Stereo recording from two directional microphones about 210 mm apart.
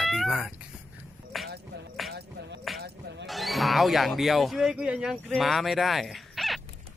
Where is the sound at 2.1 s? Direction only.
50° right (ahead or behind).